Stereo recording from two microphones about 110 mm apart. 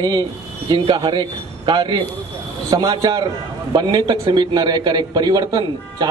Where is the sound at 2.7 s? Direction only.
35° right (ahead or behind).